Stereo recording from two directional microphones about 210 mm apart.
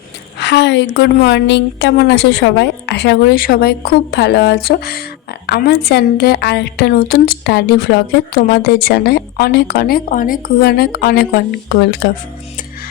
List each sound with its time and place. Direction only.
0.3 s a woman's voice: 55° left (ahead or behind)